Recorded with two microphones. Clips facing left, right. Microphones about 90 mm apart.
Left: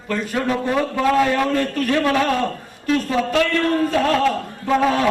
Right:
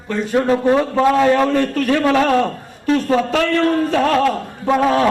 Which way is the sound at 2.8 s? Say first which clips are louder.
Right 4 dB; 35° right (ahead or behind).